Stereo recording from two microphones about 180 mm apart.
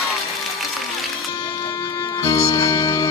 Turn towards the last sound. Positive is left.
turn(degrees=20)  # may be behind; listen again after turning